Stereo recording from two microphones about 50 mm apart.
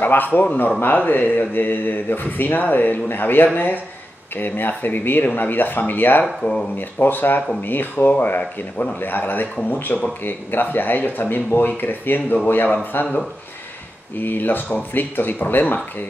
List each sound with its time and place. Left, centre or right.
0.0 s speech: left
6.2 s speech: centre
7.0 s speech: left
14.1 s speech: left